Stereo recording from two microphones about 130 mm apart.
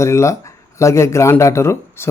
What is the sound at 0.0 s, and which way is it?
Speech, 20° left (ahead or behind).